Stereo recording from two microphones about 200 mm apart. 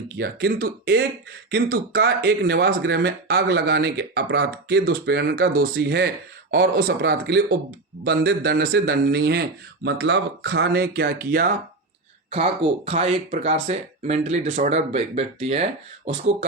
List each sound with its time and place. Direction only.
0.2 s speech: 50° right (ahead or behind)
12.3 s speech: 30° right (ahead or behind)